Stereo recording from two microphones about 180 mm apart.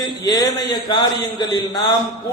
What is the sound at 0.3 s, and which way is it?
A man's voice, 20° left (ahead or behind).